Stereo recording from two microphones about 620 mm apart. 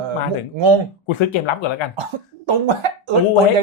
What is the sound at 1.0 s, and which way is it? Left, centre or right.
Speech, left.